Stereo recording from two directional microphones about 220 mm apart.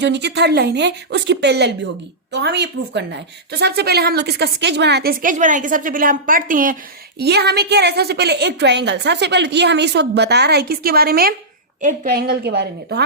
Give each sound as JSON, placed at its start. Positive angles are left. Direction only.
{"t": 0.0, "sound": "a woman's voice", "side_deg": -50}